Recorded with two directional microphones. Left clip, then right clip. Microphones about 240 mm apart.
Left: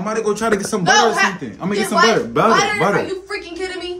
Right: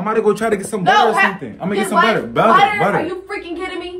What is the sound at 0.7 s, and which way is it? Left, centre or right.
Speech, left.